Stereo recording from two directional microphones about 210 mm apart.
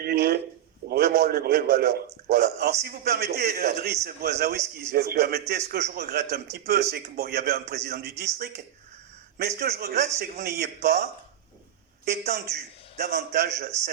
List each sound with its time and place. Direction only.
0.0 s a sound: 45° right (ahead or behind)
2.0 s a man's voice: 45° right (ahead or behind)
12.1 s a man's voice: 50° right (ahead or behind)